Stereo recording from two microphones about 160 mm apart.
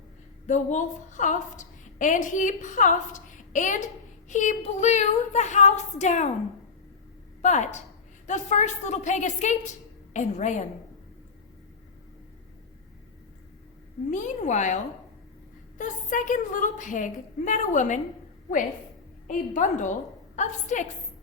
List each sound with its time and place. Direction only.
0.4 s a woman's voice: 50° left (ahead or behind)
7.4 s a woman's voice: 45° left (ahead or behind)
14.1 s a woman's voice: 50° left (ahead or behind)
15.8 s a woman's voice: 55° left (ahead or behind)
19.3 s a woman's voice: 55° left (ahead or behind)